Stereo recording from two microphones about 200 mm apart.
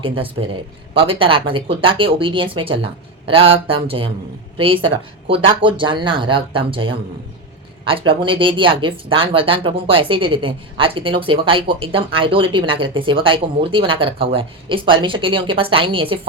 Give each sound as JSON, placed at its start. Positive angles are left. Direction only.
{"t": 0.0, "sound": "speech", "side_deg": -25}